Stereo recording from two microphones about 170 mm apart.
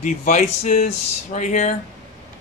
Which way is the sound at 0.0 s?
45° left (ahead or behind).